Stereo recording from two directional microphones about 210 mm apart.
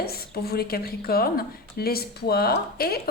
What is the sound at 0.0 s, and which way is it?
A woman's voice, 45° left (ahead or behind).